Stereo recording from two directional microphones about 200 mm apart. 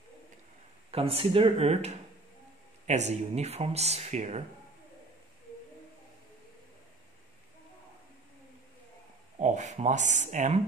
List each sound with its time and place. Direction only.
0.9 s speech: 30° right (ahead or behind)
9.4 s speech: 35° right (ahead or behind)